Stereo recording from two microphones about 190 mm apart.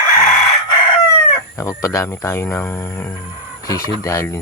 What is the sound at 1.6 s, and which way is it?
Speech, 15° left (ahead or behind).